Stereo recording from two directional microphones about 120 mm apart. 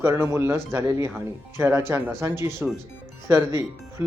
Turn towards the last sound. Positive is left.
turn(degrees=-25)  # may be behind; listen again after turning